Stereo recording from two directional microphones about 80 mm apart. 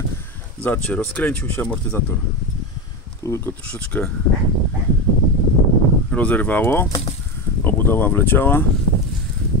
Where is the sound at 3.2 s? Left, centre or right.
Left.